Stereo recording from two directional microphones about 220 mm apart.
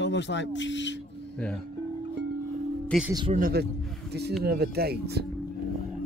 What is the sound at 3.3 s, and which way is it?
Speech, 40° right (ahead or behind).